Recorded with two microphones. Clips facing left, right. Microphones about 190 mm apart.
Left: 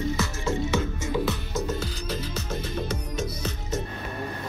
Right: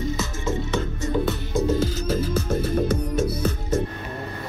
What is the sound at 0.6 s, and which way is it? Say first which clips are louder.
Music: right 1 dB; 10° left (ahead or behind).